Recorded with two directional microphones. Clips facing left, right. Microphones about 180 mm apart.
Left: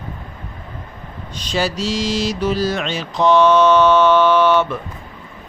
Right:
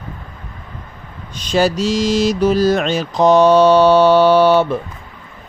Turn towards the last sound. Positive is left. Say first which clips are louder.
# right 3 dB
turn(degrees=-35)  # may be behind; listen again after turning